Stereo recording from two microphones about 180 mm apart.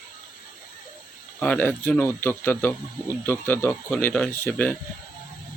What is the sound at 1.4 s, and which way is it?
Speech, 10° left (ahead or behind).